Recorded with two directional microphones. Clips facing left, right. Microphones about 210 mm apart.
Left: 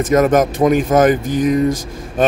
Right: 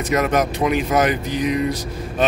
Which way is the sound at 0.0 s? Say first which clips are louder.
Left 6 dB; 50° left (ahead or behind).